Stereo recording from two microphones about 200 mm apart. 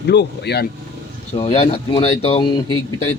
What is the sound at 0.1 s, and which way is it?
Speech, 55° left (ahead or behind).